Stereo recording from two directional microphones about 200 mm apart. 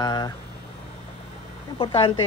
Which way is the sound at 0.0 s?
20° left (ahead or behind).